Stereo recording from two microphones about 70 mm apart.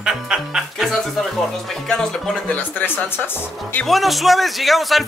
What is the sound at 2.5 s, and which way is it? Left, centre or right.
Speech, left.